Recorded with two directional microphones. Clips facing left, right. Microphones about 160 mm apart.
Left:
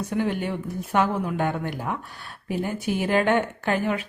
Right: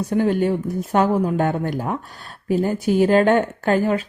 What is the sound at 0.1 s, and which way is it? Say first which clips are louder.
Speech: right 8 dB; 40° right (ahead or behind).